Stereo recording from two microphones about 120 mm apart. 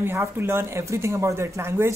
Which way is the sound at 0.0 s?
20° right (ahead or behind).